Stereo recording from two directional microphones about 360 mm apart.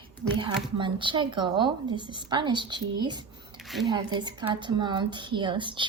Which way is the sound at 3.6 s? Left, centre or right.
Centre.